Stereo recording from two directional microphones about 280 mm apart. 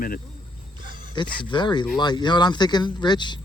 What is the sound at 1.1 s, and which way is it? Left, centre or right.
A man's voice, centre.